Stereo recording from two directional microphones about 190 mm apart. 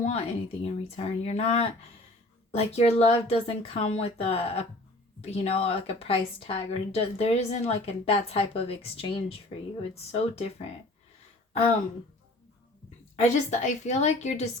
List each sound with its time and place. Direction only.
0.0 s a woman's voice: 35° left (ahead or behind)
13.2 s a woman's voice: 35° left (ahead or behind)